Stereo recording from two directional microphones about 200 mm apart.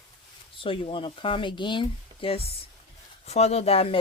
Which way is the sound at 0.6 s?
25° left (ahead or behind).